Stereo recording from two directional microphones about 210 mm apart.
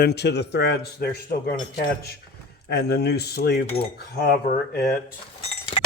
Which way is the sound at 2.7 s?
50° left (ahead or behind).